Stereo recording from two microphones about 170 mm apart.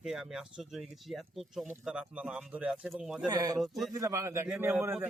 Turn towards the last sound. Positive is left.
turn(degrees=-10)  # may be behind; listen again after turning